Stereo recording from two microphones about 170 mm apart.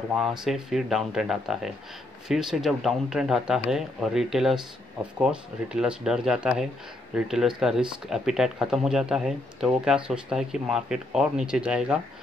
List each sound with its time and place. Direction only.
0.2 s speech: centre (ahead or behind)